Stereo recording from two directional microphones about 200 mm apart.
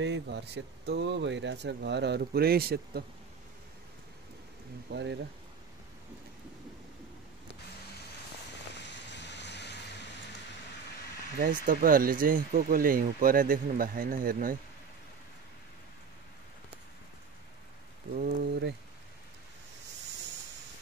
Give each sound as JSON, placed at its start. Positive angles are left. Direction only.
{"t": 0.0, "sound": "speech", "side_deg": -60}
{"t": 4.9, "sound": "speech", "side_deg": -60}
{"t": 9.1, "sound": "vehicle", "side_deg": 60}
{"t": 11.3, "sound": "speech", "side_deg": -45}
{"t": 18.2, "sound": "speech", "side_deg": -55}